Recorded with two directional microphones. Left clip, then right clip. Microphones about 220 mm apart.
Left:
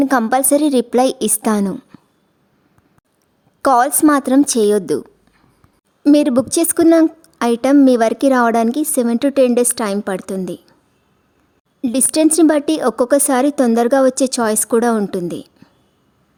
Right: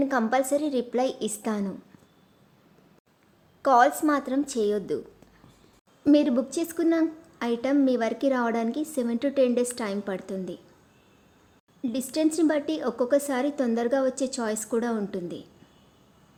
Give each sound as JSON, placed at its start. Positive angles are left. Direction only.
{"t": 0.0, "sound": "a woman's voice", "side_deg": 50}
{"t": 3.6, "sound": "a woman's voice", "side_deg": 50}
{"t": 6.1, "sound": "a woman's voice", "side_deg": 50}
{"t": 11.8, "sound": "a woman's voice", "side_deg": 50}